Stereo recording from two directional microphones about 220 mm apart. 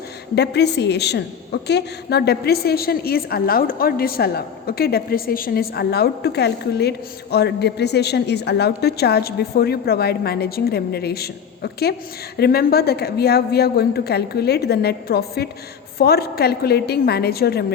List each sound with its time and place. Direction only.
0.3 s a woman's voice: 50° left (ahead or behind)